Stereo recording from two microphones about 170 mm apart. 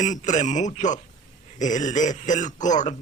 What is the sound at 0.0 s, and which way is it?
A man's voice, 45° left (ahead or behind).